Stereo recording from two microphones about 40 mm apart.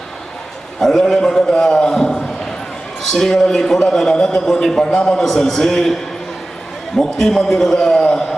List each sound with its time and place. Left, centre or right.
0.8 s a man's voice: centre
2.0 s a sound: centre
3.1 s a man's voice: centre